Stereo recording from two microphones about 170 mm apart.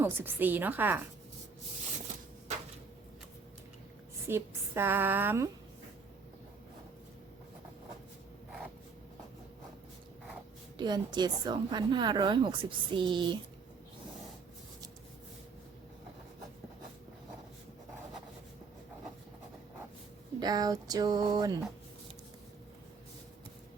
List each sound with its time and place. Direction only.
0.0 s a woman's voice: 10° right (ahead or behind)
4.3 s a woman's voice: 15° right (ahead or behind)
10.8 s a woman's voice: 25° right (ahead or behind)
20.4 s a woman's voice: 20° right (ahead or behind)